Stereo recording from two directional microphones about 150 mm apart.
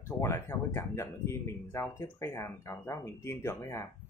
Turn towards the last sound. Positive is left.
turn(degrees=20)  # may be behind; listen again after turning